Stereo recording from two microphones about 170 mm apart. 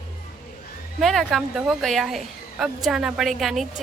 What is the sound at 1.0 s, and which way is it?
Speech, centre (ahead or behind).